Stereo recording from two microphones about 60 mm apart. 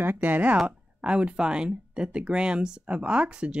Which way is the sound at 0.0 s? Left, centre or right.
Right.